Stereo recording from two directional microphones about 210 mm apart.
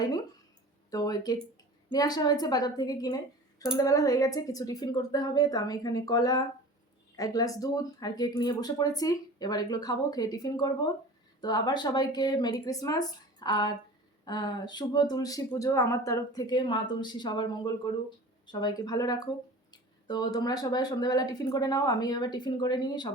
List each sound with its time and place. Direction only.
0.9 s speech: 15° left (ahead or behind)